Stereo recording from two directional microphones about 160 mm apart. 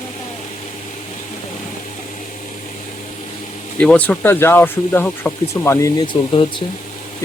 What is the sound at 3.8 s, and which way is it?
Speech, 5° left (ahead or behind).